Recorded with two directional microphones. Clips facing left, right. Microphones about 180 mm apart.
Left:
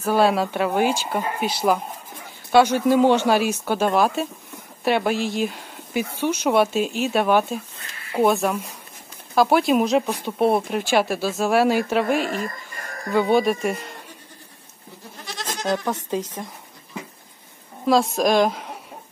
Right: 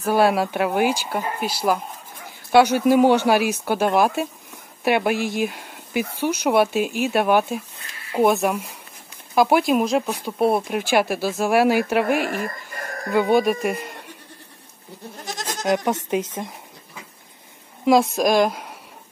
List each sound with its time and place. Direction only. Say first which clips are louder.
0.0 s speech: right 1 dB; 10° right (ahead or behind)
9.7 s speech: left 1 dB; centre (ahead or behind)
12.1 s speech: even; 60° right (ahead or behind)
13.1 s speech: right 1 dB; 10° right (ahead or behind)
15.3 s goat: right 3 dB; 45° right (ahead or behind)
15.6 s speech: right 3 dB; 15° right (ahead or behind)
18.1 s speech: even; 5° right (ahead or behind)